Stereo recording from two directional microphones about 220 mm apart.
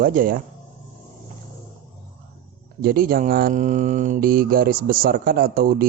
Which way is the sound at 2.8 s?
40° right (ahead or behind).